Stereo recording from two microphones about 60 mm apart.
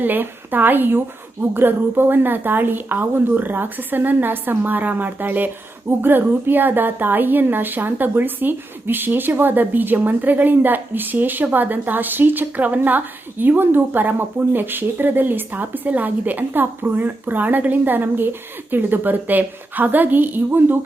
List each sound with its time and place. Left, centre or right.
0.0 s speech: right